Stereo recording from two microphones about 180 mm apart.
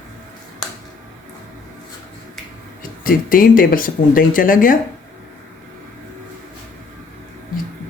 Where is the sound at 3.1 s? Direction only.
50° left (ahead or behind).